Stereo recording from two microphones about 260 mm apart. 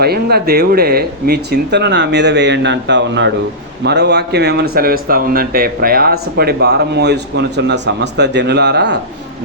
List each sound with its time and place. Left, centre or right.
0.0 s speech: right